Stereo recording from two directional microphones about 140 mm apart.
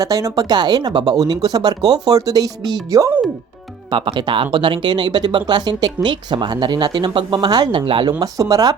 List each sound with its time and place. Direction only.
0.0 s speech: 25° right (ahead or behind)
3.8 s speech: 35° right (ahead or behind)